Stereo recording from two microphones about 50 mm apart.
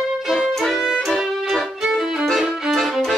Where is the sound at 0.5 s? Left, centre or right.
Centre.